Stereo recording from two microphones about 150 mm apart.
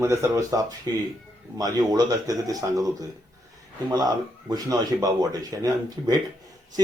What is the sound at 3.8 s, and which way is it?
Speech, 25° right (ahead or behind).